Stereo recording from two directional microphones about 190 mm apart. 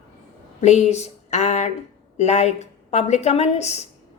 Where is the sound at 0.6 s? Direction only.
35° left (ahead or behind).